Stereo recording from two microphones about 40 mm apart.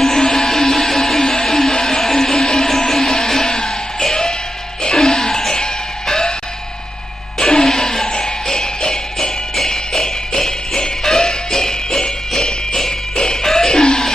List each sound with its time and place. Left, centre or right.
0.0 s music: centre
7.3 s music: centre
13.2 s a sound: centre